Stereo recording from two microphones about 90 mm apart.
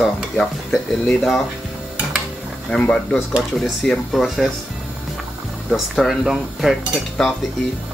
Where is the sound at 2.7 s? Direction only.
10° left (ahead or behind).